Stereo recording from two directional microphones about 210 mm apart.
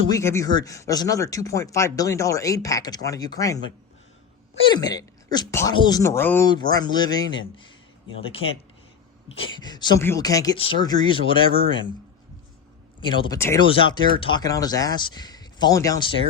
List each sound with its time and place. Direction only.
0.1 s speech: 15° left (ahead or behind)
4.7 s speech: 20° left (ahead or behind)
9.6 s speech: 20° left (ahead or behind)
13.3 s speech: 15° left (ahead or behind)